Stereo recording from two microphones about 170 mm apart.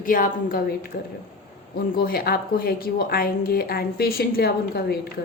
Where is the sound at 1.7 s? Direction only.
60° left (ahead or behind).